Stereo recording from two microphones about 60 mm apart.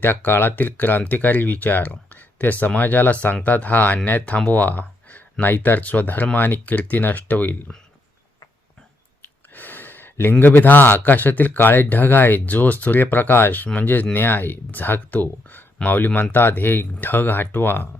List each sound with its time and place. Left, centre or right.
0.0 s speech: left
9.5 s gasp: left
10.4 s speech: left